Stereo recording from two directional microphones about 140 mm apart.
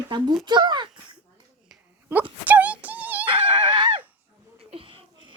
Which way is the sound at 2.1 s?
10° right (ahead or behind).